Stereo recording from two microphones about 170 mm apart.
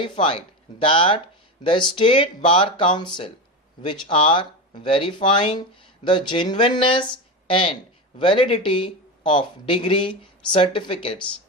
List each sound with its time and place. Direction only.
0.0 s speech: 30° left (ahead or behind)